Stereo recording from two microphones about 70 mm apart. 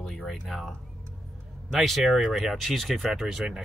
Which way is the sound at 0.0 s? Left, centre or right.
Centre.